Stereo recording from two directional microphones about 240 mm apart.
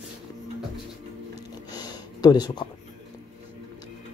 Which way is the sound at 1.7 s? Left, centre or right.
Centre.